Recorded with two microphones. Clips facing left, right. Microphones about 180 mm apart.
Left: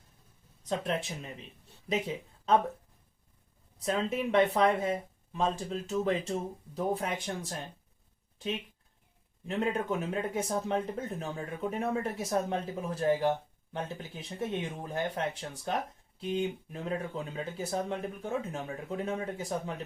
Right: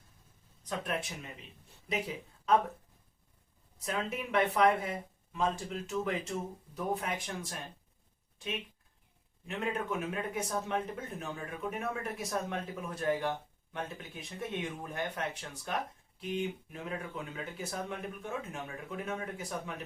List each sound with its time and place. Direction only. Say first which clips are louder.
0.7 s speech: left 4 dB; 25° left (ahead or behind)
3.9 s speech: left 5 dB; 30° left (ahead or behind)
9.5 s speech: left 4 dB; 35° left (ahead or behind)